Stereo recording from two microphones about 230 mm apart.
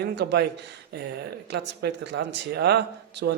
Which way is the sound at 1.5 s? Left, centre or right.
Right.